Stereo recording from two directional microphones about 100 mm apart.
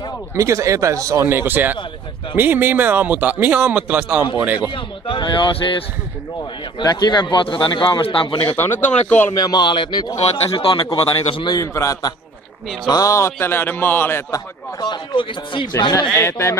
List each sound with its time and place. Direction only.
0.3 s a man's voice: 30° right (ahead or behind); by 4.6 s 15° right (ahead or behind)
4.6 s speech: 55° left (ahead or behind)
6.8 s speech: 45° left (ahead or behind); by 8.5 s 60° left (ahead or behind)
8.5 s speech: 20° left (ahead or behind)
9.3 s speech: 45° left (ahead or behind)
11.4 s a man's voice: 35° left (ahead or behind)
14.3 s speech: 50° left (ahead or behind)
16.1 s speech: 25° left (ahead or behind)